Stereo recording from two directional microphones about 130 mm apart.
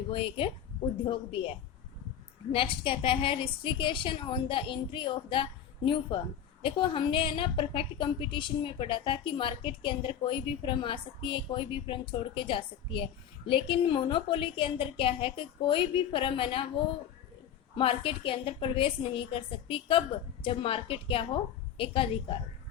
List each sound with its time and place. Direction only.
0.1 s a woman's voice: 40° left (ahead or behind)
2.5 s a woman's voice: 45° left (ahead or behind)